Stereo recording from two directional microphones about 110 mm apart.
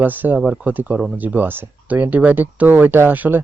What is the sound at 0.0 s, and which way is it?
Speech, 15° right (ahead or behind).